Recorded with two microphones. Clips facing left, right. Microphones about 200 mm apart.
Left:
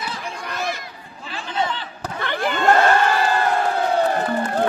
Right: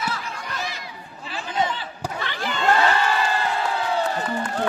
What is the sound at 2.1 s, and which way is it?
Crowd, 55° left (ahead or behind).